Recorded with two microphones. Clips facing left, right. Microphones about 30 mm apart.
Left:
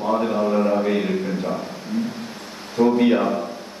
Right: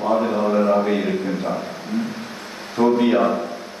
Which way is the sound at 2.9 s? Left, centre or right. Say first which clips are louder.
Right 2 dB; centre.